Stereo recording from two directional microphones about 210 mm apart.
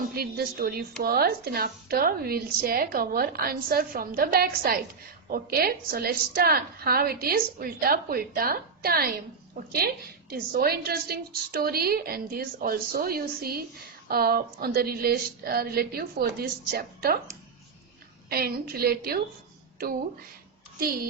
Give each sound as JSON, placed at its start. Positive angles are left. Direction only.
{"t": 0.1, "sound": "a woman's voice", "side_deg": -45}
{"t": 20.7, "sound": "a woman's voice", "side_deg": -45}